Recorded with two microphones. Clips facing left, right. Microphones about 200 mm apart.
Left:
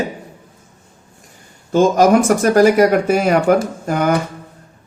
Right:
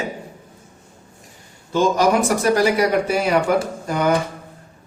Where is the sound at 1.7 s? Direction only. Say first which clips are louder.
Left 5 dB; 45° left (ahead or behind).